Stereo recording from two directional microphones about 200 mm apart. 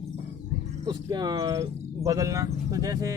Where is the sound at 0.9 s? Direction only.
20° right (ahead or behind).